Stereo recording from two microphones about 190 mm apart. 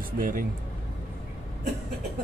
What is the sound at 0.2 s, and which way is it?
Speech, 45° right (ahead or behind).